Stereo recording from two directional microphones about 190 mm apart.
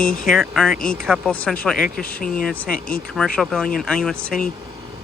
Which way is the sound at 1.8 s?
50° left (ahead or behind).